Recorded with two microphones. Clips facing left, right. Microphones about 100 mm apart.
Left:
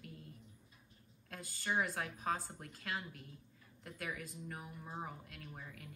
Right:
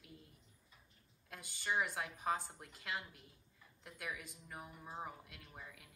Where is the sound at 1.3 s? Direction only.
Centre (ahead or behind).